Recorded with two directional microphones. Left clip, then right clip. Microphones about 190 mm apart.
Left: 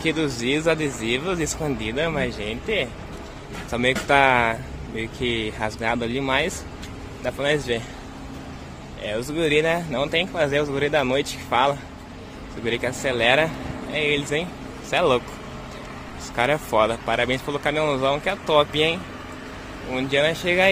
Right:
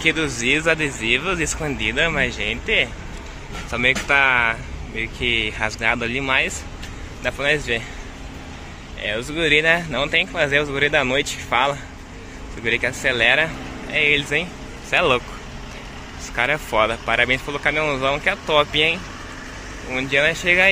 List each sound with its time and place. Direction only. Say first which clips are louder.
0.0 s speech: right 4 dB; 10° left (ahead or behind)
9.0 s speech: right 2 dB; 10° left (ahead or behind)
16.3 s speech: right 1 dB; 15° left (ahead or behind)